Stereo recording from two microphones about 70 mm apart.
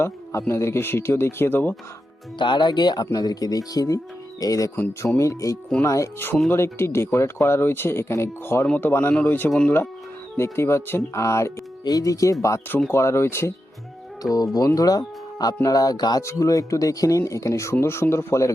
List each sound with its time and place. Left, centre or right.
0.0 s speech: left
2.5 s speech: left
5.0 s speech: left
6.5 s speech: left
10.3 s speech: left
11.9 s speech: left
14.3 s speech: left
16.2 s speech: left